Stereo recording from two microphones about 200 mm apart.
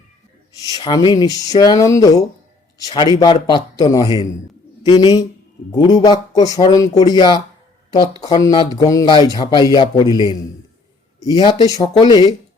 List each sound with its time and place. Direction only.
0.7 s speech: 20° left (ahead or behind)